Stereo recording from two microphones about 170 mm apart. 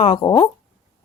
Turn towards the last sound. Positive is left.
turn(degrees=25)  # may be behind; listen again after turning